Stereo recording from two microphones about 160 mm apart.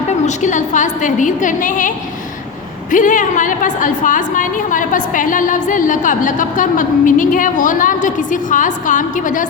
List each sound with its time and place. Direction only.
0.3 s a woman's voice: 50° left (ahead or behind)
2.9 s a woman's voice: 55° left (ahead or behind)